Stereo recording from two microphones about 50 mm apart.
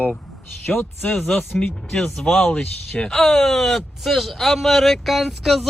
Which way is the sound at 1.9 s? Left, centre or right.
Centre.